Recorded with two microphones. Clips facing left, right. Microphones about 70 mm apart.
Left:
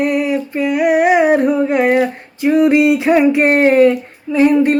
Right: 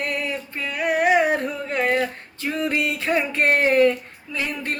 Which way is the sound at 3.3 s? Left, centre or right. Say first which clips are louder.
Left 8 dB; centre.